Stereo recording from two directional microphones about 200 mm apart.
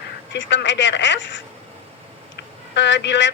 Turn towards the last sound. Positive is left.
turn(degrees=65)  # may be behind; listen again after turning